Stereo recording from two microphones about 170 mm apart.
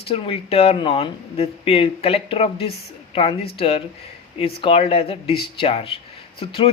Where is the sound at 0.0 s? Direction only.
35° left (ahead or behind).